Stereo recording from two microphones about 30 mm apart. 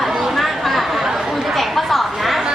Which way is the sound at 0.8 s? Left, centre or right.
Centre.